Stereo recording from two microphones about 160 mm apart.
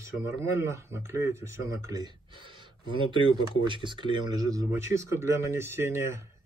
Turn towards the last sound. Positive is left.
turn(degrees=-15)  # may be behind; listen again after turning